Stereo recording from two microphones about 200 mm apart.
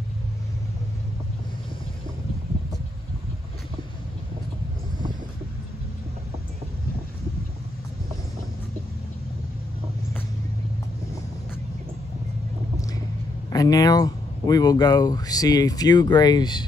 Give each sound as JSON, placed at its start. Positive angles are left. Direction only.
{"t": 13.5, "sound": "speech", "side_deg": 15}